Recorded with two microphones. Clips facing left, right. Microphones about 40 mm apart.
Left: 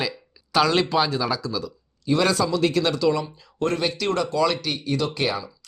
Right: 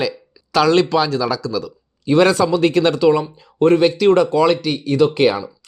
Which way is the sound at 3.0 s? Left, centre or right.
Right.